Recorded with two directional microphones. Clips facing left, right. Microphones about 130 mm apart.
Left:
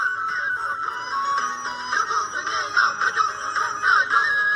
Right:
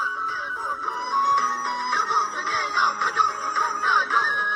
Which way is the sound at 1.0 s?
55° right (ahead or behind).